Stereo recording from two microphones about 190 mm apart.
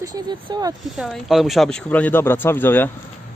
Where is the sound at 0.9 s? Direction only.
Centre (ahead or behind).